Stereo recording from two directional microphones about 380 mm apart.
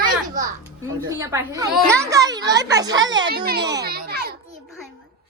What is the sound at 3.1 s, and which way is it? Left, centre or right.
Speech, right.